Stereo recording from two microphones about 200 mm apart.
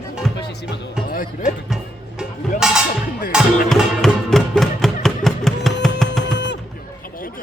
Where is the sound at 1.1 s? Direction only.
45° left (ahead or behind).